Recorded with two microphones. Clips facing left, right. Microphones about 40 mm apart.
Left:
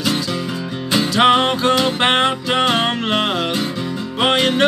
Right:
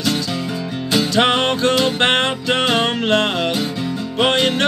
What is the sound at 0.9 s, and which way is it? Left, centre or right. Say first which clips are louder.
Music: left 2 dB; centre.